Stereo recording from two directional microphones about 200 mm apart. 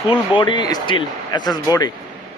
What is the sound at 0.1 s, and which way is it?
Speech, 25° left (ahead or behind).